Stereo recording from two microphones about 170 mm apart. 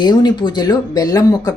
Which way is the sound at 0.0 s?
25° left (ahead or behind).